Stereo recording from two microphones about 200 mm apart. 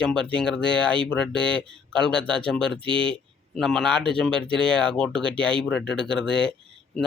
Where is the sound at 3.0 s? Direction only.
5° left (ahead or behind).